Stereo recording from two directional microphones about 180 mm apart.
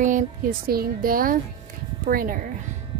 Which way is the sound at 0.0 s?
50° right (ahead or behind).